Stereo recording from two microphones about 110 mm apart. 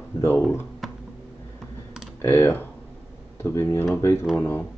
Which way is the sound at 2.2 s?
20° left (ahead or behind).